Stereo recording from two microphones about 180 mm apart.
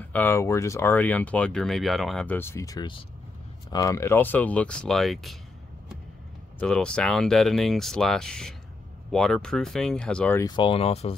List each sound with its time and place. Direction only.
0.0 s speech: 10° left (ahead or behind)
6.6 s speech: 5° left (ahead or behind)
10.4 s speech: 25° left (ahead or behind)